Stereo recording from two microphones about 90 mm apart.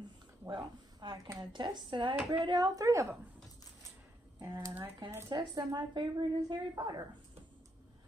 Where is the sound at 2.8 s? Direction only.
35° right (ahead or behind).